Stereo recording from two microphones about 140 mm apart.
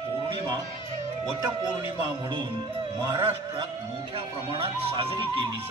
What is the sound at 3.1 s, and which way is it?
A man's voice, 35° right (ahead or behind).